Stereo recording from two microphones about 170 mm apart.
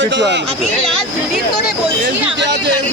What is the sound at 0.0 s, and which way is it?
Speech, 90° right.